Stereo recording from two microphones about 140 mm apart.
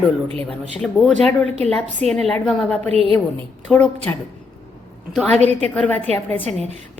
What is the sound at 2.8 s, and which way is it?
Speech, 45° right (ahead or behind).